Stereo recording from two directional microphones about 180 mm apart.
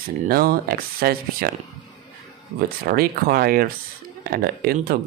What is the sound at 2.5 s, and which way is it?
Speech, 55° right (ahead or behind).